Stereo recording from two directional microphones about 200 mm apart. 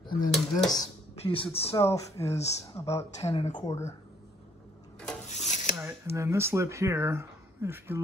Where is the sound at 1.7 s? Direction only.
15° left (ahead or behind).